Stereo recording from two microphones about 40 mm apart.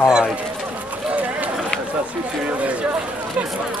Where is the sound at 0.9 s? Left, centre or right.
Right.